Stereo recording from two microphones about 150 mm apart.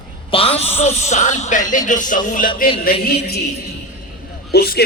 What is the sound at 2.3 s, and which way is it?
Music, 65° left (ahead or behind).